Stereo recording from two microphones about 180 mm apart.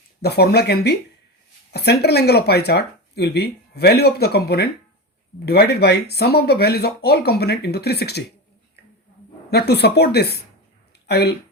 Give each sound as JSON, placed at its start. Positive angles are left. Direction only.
{"t": 0.2, "sound": "speech", "side_deg": 65}
{"t": 9.5, "sound": "speech", "side_deg": 65}